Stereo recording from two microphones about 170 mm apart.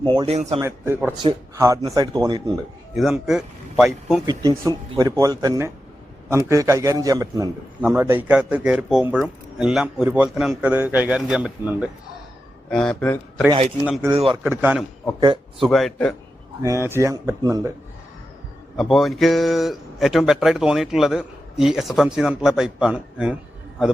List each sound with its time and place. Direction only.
0.0 s speech: 30° right (ahead or behind)
0.6 s a man's voice: 15° right (ahead or behind)
2.9 s speech: centre (ahead or behind)
4.3 s a man's voice: 20° right (ahead or behind); by 11.9 s 5° right (ahead or behind)
12.7 s speech: 5° left (ahead or behind)
14.5 s a man's voice: 10° right (ahead or behind)
15.2 s speech: 25° right (ahead or behind)
15.6 s speech: centre (ahead or behind)
16.6 s a man's voice: 15° right (ahead or behind)
18.8 s speech: centre (ahead or behind)